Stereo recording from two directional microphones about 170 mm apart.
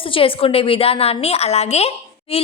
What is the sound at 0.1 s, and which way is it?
A woman's voice, 30° left (ahead or behind).